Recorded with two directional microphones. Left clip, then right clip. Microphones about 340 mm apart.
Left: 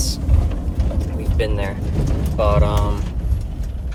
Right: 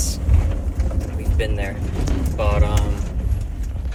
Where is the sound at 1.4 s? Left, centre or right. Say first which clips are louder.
Left 3 dB; centre.